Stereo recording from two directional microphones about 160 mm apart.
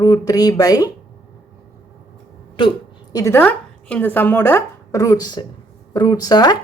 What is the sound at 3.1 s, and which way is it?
Speech, 15° left (ahead or behind).